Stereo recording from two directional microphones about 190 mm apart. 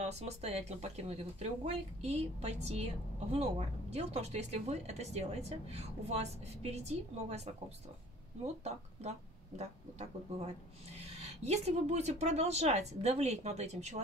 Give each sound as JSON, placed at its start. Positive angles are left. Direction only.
{"t": 0.0, "sound": "a woman's voice", "side_deg": -35}
{"t": 9.6, "sound": "a woman's voice", "side_deg": -35}